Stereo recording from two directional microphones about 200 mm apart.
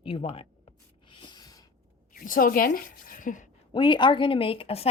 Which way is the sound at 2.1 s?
45° left (ahead or behind).